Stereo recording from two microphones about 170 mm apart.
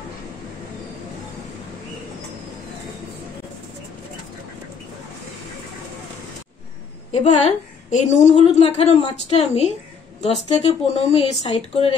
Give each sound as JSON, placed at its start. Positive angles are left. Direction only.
{"t": 7.2, "sound": "a woman's voice", "side_deg": 40}